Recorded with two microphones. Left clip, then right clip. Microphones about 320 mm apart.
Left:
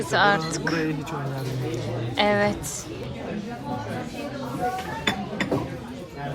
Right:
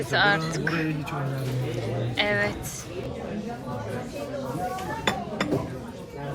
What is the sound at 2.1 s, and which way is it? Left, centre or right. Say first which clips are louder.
Speech: left 4 dB; centre.